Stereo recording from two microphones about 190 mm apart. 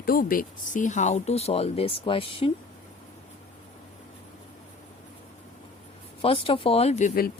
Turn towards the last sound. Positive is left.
turn(degrees=50)  # may be behind; listen again after turning